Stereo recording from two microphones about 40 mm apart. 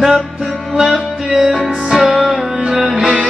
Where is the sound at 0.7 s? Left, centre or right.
Centre.